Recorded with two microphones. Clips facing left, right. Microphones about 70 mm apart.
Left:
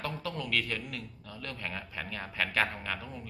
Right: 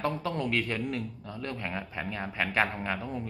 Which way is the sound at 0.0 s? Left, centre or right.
Right.